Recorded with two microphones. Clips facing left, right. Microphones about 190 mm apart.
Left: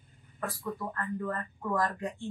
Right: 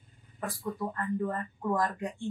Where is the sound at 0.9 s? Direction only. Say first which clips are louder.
Right 3 dB; 15° right (ahead or behind).